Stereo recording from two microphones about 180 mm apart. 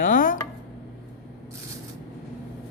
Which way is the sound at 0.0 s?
50° left (ahead or behind).